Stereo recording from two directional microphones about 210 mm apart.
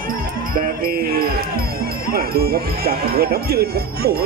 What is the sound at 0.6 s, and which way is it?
Speech, 45° right (ahead or behind).